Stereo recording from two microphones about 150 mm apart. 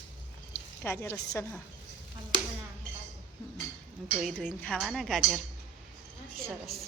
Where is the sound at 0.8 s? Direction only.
15° left (ahead or behind).